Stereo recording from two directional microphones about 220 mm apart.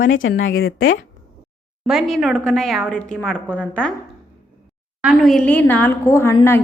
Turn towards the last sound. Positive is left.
turn(degrees=10)  # may be behind; listen again after turning